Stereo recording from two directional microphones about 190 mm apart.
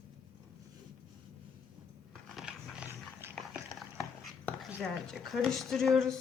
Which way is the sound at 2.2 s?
Centre (ahead or behind).